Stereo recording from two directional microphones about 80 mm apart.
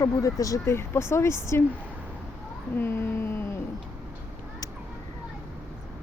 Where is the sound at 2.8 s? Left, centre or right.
Left.